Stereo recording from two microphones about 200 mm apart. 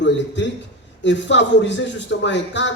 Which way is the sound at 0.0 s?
65° left (ahead or behind).